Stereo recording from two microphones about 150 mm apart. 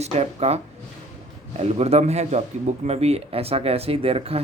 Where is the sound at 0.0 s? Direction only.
45° right (ahead or behind).